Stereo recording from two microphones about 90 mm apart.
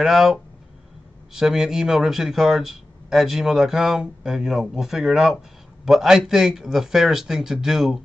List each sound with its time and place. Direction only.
0.0 s speech: 5° right (ahead or behind)